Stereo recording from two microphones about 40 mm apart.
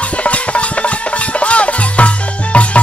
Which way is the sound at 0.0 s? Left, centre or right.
Left.